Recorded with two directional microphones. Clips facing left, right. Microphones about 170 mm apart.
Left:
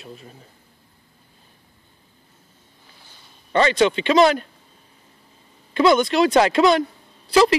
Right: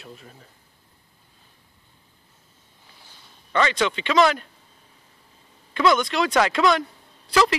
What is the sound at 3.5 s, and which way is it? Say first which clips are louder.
Speech: left 5 dB; 35° left (ahead or behind).